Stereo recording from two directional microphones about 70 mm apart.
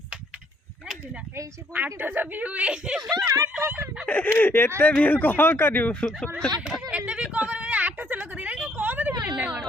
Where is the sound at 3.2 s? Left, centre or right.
Right.